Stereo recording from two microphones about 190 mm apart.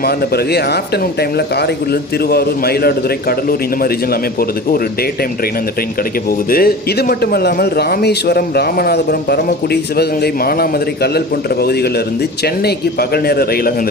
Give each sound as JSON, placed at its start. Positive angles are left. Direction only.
{"t": 0.0, "sound": "a man's voice", "side_deg": 55}
{"t": 6.5, "sound": "a man's voice", "side_deg": 50}